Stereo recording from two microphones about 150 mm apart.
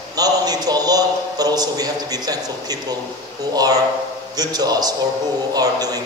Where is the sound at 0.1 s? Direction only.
25° right (ahead or behind).